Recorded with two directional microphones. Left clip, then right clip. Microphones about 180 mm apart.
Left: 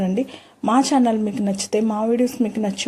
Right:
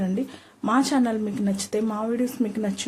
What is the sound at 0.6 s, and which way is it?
Speech, 20° left (ahead or behind).